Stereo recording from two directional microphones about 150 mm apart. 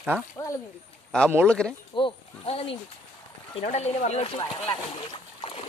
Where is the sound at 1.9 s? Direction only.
40° left (ahead or behind).